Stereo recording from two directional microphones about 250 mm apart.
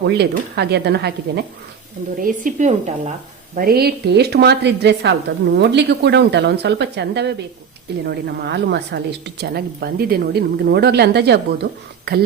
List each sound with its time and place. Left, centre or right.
0.0 s a woman's voice: right
2.2 s a woman's voice: right